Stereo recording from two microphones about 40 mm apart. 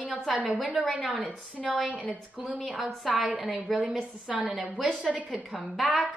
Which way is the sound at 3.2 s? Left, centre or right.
Right.